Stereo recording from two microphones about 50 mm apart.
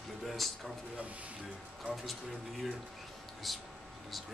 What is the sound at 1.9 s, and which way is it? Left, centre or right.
Speech, right.